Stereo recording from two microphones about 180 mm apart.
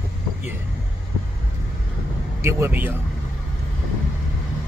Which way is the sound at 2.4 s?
10° right (ahead or behind).